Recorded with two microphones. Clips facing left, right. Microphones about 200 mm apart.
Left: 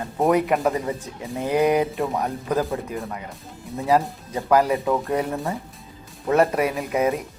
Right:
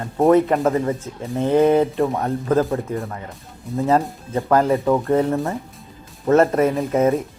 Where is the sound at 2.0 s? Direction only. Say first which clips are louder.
Right 4 dB; centre (ahead or behind).